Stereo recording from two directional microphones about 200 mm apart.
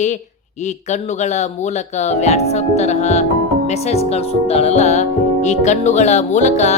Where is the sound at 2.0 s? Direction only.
35° left (ahead or behind).